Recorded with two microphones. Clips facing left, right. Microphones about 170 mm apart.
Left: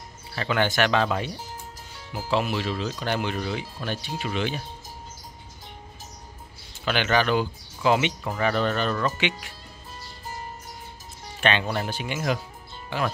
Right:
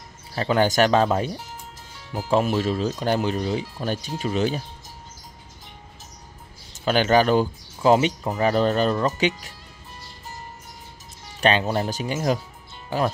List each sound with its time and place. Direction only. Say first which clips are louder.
0.4 s speech: right 4 dB; 35° right (ahead or behind)
2.3 s speech: right 5 dB; 45° right (ahead or behind)
6.7 s speech: right 5 dB; 40° right (ahead or behind)
11.4 s speech: right 4 dB; 35° right (ahead or behind)